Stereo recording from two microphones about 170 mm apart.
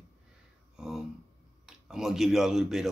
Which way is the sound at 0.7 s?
Centre (ahead or behind).